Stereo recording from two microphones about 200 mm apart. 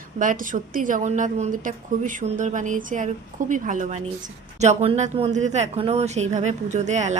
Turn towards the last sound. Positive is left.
turn(degrees=-35)  # may be behind; listen again after turning